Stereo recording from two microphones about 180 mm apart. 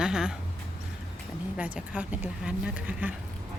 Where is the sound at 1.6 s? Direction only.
5° right (ahead or behind).